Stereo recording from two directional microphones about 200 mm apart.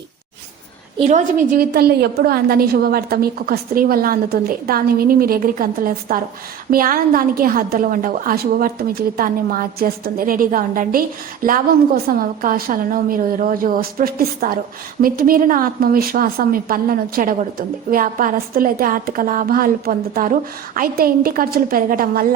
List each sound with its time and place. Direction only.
0.9 s a woman's voice: 35° right (ahead or behind)